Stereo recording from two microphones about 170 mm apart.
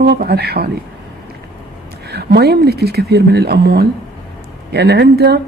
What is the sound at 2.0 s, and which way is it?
A woman's voice, 70° right (ahead or behind).